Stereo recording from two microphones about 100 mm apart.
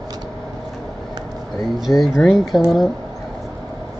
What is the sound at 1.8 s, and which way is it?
Speech, centre (ahead or behind).